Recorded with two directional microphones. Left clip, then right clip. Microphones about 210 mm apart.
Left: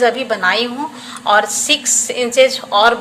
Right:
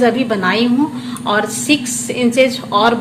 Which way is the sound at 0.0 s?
15° left (ahead or behind).